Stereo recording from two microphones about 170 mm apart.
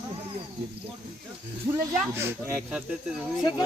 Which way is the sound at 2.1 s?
15° right (ahead or behind).